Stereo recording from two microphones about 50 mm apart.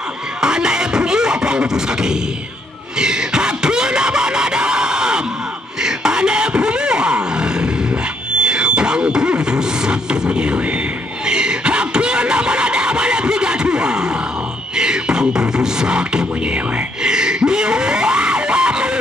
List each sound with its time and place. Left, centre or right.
0.4 s beatboxing: centre
3.0 s music: centre
5.8 s roar: centre
11.2 s a sound: centre
14.8 s music: centre